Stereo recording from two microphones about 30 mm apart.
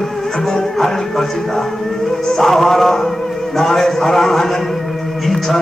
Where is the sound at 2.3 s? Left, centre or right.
Centre.